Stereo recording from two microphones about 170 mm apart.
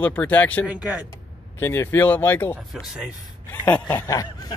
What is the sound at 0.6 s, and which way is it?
Speech, 10° right (ahead or behind).